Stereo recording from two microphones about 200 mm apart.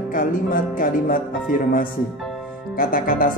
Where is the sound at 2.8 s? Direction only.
45° left (ahead or behind).